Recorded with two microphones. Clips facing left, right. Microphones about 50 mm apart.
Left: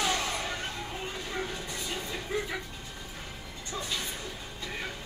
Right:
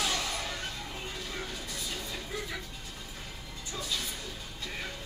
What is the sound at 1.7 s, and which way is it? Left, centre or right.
Music, left.